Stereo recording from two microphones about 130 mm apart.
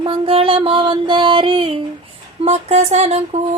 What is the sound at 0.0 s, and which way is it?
Music, 45° right (ahead or behind).